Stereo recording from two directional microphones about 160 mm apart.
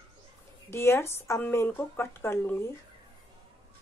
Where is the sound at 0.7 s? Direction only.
15° left (ahead or behind).